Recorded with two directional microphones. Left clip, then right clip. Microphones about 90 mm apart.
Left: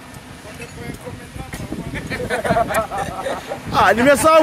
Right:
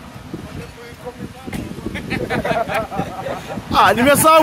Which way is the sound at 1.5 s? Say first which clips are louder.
Right 2 dB; 75° right (ahead or behind).